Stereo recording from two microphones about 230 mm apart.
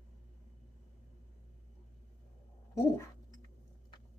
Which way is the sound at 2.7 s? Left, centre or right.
Centre.